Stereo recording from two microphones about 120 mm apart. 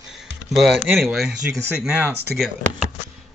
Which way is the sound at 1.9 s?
15° right (ahead or behind).